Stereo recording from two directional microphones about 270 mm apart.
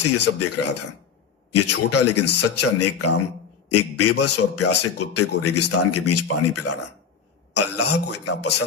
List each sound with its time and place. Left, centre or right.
0.0 s a man's voice: left